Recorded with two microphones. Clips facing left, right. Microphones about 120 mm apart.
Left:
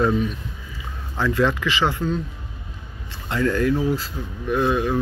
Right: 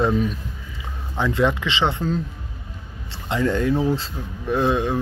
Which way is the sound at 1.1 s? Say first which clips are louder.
Even; 20° right (ahead or behind).